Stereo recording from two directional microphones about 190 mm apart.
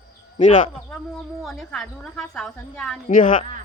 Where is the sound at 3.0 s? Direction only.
45° left (ahead or behind).